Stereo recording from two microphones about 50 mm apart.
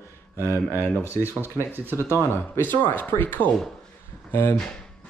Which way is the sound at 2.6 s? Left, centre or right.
Left.